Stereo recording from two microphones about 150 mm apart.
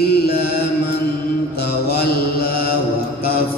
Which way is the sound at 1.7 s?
90° left.